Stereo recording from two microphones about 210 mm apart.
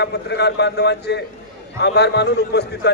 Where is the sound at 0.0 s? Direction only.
55° left (ahead or behind).